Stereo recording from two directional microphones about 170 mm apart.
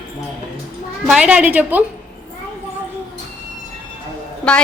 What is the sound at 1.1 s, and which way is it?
Speech, 5° right (ahead or behind).